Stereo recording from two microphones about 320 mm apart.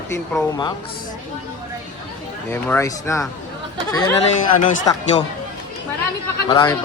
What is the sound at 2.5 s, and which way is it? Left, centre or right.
Speech, centre.